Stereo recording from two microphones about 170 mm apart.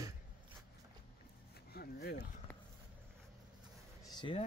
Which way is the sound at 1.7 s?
65° left (ahead or behind).